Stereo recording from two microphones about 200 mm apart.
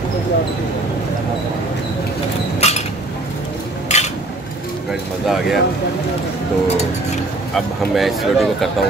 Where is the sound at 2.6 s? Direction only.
30° left (ahead or behind).